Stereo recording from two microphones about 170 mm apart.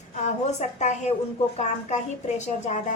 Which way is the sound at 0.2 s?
45° left (ahead or behind).